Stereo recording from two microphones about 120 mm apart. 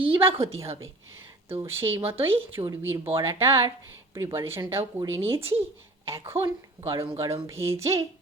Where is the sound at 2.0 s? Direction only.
50° right (ahead or behind).